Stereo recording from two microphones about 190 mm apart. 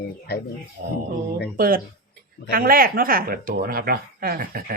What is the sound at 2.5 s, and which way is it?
Speech, 50° right (ahead or behind).